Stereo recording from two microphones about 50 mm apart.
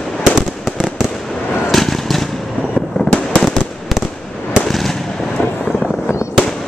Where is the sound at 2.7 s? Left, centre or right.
Left.